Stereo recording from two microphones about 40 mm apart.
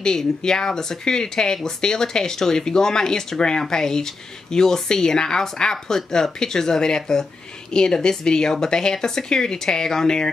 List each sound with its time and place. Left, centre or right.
0.0 s speech: centre